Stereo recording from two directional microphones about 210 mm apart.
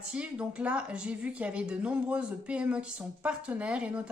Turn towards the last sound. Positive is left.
turn(degrees=-5)  # may be behind; listen again after turning